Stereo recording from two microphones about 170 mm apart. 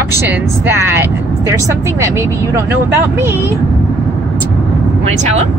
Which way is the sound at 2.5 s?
15° right (ahead or behind).